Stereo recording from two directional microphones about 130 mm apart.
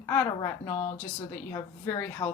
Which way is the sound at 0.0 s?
20° left (ahead or behind).